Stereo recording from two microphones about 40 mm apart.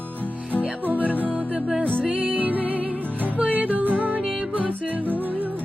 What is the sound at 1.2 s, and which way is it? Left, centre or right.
Music, right.